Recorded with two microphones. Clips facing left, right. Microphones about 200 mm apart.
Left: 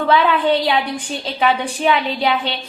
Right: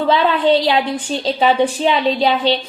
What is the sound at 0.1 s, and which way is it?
A woman's voice, 30° right (ahead or behind).